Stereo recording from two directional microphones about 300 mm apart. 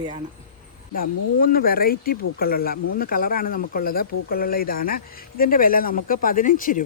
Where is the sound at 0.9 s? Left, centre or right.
Left.